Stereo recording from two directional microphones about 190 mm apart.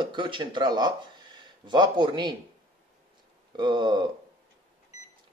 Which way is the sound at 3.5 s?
25° right (ahead or behind).